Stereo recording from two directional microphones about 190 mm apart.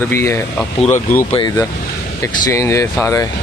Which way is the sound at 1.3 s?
25° left (ahead or behind).